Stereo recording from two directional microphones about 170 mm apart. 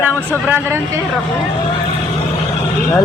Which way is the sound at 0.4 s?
10° right (ahead or behind).